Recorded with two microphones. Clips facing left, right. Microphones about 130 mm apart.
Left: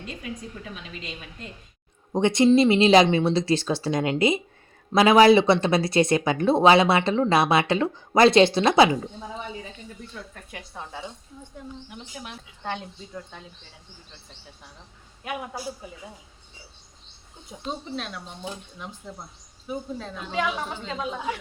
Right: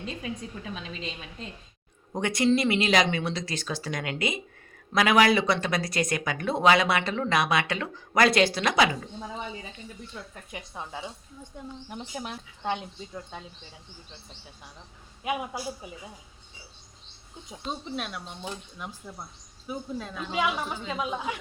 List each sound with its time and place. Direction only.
2.1 s speech: 25° left (ahead or behind)
10.5 s a woman's voice: 15° right (ahead or behind)
11.9 s speech: 35° right (ahead or behind)
12.6 s a woman's voice: 15° right (ahead or behind)
17.9 s a woman's voice: 10° right (ahead or behind)
19.6 s a woman's voice: 5° right (ahead or behind)